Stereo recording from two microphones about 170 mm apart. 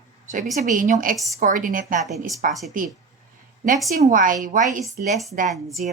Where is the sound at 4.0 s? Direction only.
50° right (ahead or behind).